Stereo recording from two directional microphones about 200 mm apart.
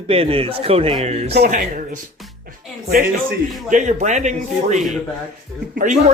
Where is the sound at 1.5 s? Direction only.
40° right (ahead or behind).